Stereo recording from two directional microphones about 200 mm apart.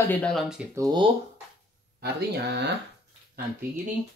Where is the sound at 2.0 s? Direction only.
55° right (ahead or behind).